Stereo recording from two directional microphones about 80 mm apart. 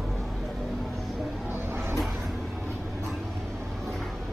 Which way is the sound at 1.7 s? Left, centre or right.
Right.